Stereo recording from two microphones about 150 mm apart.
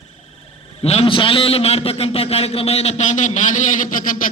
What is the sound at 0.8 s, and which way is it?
A man's voice, 45° left (ahead or behind).